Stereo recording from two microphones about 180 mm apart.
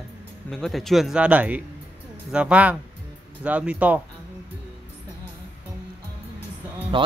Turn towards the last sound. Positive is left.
turn(degrees=-25)  # may be behind; listen again after turning